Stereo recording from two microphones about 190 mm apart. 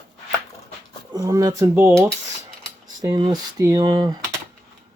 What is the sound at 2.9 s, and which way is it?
Speech, 20° right (ahead or behind).